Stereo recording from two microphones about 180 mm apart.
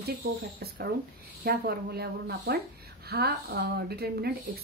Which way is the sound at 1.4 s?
60° right (ahead or behind).